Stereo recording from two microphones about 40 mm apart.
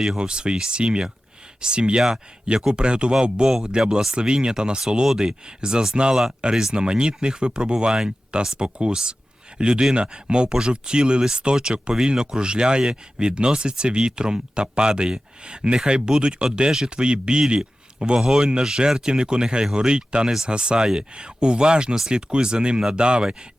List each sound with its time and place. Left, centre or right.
0.2 s speech: right
18.2 s speech: centre